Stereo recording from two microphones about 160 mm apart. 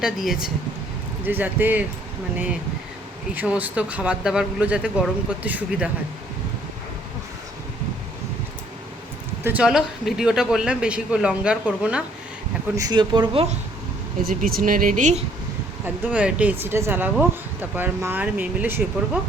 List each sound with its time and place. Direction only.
0.0 s speech: 5° right (ahead or behind)
3.3 s speech: 10° right (ahead or behind)
9.4 s speech: 10° right (ahead or behind)
12.7 s speech: 25° right (ahead or behind)
14.2 s speech: 65° right (ahead or behind)
16.0 s speech: 10° right (ahead or behind)